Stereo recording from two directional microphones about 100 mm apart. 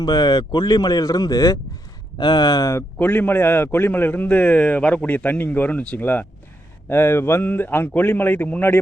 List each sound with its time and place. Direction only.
0.0 s speech: 40° left (ahead or behind)
2.1 s speech: 50° left (ahead or behind)
2.7 s a man's voice: 15° left (ahead or behind)